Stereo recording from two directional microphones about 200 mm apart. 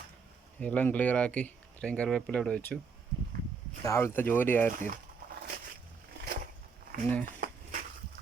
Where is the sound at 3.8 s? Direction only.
15° left (ahead or behind).